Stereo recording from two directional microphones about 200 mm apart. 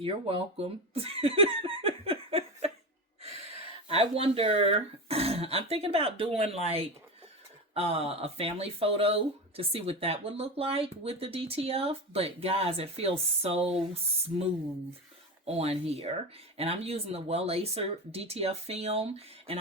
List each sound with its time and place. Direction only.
0.0 s speech: 30° right (ahead or behind)
3.8 s speech: 30° right (ahead or behind)
15.4 s speech: 30° right (ahead or behind)